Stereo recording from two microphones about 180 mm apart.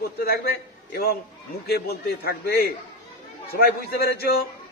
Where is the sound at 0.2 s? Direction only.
60° left (ahead or behind).